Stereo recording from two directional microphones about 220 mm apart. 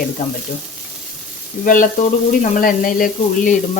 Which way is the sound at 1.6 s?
40° left (ahead or behind).